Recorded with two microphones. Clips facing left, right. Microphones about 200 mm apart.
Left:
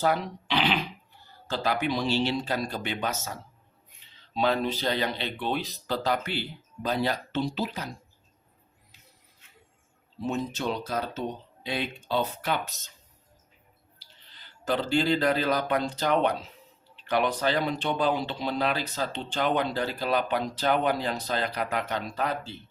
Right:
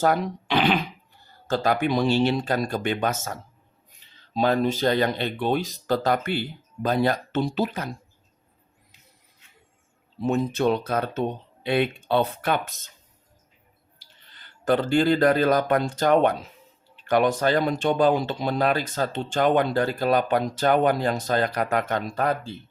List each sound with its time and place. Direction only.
0.0 s speech: 50° right (ahead or behind)
4.4 s speech: 45° right (ahead or behind)
10.2 s speech: 55° right (ahead or behind)
14.3 s speech: 55° right (ahead or behind)